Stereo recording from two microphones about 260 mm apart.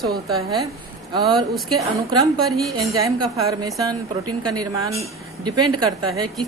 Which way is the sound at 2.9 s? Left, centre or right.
Centre.